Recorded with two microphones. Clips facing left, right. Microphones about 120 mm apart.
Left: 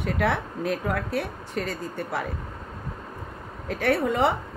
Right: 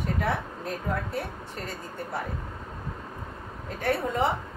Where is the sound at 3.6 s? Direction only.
90° left.